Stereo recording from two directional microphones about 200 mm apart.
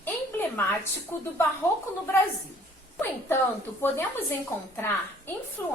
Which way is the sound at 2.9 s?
10° left (ahead or behind).